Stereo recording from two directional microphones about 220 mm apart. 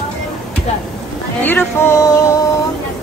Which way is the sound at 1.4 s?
10° left (ahead or behind).